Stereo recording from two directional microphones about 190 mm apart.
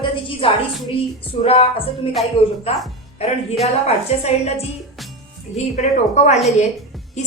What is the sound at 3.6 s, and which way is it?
A woman's voice, 35° left (ahead or behind).